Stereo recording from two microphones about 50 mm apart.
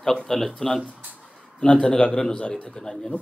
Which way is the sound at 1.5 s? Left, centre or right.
Centre.